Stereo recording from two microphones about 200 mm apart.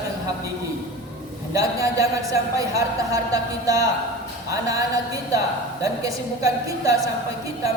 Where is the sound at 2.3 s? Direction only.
15° right (ahead or behind).